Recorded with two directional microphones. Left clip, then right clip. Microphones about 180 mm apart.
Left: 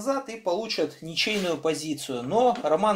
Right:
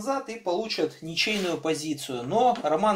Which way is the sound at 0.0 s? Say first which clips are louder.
Left 1 dB; 40° left (ahead or behind).